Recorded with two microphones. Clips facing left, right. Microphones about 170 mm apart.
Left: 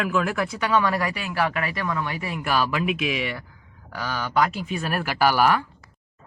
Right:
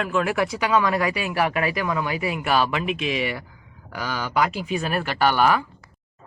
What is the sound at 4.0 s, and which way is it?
Speech, 10° right (ahead or behind).